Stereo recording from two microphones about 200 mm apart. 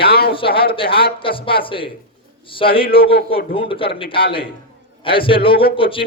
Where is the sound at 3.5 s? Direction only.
25° left (ahead or behind).